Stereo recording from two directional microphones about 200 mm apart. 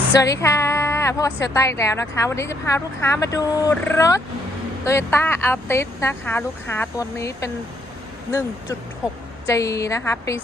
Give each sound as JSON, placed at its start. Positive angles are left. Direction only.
{"t": 0.2, "sound": "a woman's voice", "side_deg": 15}
{"t": 9.5, "sound": "a woman's voice", "side_deg": 15}